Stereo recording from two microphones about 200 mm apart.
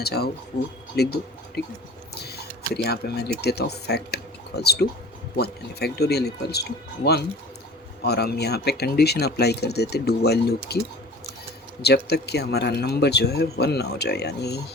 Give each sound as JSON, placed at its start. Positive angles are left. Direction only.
{"t": 0.0, "sound": "speech", "side_deg": 55}
{"t": 11.8, "sound": "speech", "side_deg": 55}